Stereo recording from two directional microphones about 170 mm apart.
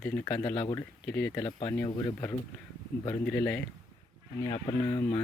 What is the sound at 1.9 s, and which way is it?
Speech, 25° left (ahead or behind).